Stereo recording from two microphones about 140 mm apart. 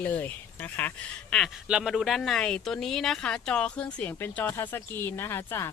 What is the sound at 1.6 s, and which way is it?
Speech, 5° right (ahead or behind).